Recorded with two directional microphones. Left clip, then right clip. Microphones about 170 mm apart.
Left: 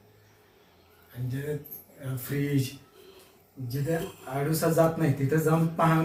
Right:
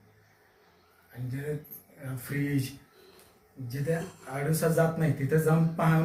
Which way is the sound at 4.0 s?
Centre (ahead or behind).